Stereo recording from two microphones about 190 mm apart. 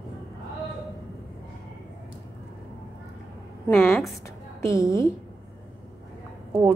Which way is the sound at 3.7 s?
10° left (ahead or behind).